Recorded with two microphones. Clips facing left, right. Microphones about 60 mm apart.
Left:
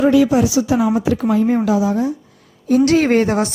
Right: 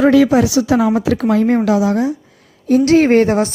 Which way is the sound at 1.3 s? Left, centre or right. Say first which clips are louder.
Right 2 dB; right.